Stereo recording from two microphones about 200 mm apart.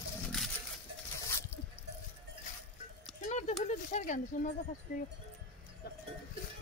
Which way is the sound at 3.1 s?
35° left (ahead or behind).